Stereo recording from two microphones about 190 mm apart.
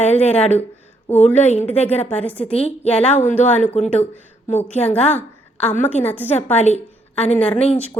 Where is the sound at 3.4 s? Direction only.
40° left (ahead or behind).